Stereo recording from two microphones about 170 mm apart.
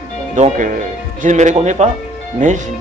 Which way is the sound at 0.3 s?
45° right (ahead or behind).